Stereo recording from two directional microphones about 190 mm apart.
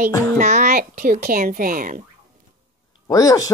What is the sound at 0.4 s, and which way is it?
Speech, 40° right (ahead or behind).